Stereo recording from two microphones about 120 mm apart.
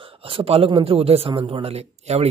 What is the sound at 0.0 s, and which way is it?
A man's voice, 50° right (ahead or behind).